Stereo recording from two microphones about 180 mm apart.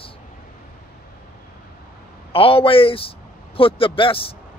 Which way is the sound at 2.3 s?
30° left (ahead or behind).